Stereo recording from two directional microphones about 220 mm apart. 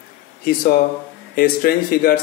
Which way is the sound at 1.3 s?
40° left (ahead or behind).